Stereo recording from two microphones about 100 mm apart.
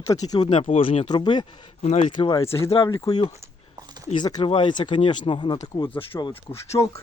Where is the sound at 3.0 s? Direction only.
40° left (ahead or behind).